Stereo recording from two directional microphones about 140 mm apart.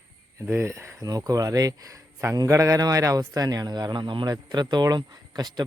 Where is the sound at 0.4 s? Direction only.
20° right (ahead or behind).